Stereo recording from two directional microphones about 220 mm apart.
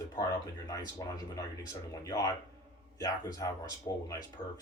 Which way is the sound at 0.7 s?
15° left (ahead or behind).